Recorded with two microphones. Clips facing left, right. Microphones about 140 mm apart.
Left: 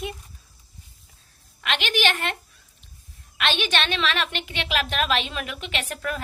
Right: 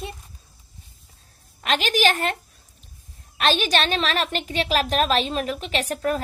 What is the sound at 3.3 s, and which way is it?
A woman's voice, 40° right (ahead or behind).